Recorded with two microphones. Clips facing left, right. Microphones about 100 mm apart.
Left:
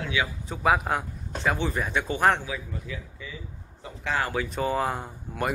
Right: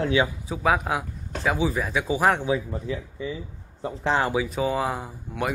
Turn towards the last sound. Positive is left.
turn(degrees=0)  # may be behind; listen again after turning